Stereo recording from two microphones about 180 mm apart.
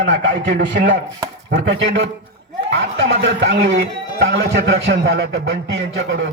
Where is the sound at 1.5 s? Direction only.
90° right.